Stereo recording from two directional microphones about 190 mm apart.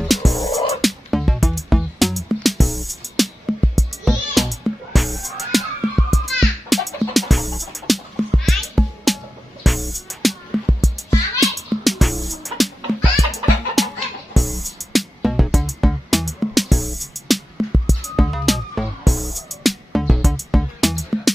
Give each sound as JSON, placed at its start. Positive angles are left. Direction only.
{"t": 0.1, "sound": "music", "side_deg": 0}